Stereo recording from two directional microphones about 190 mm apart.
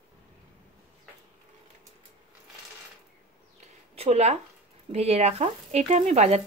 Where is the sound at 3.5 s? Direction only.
35° right (ahead or behind).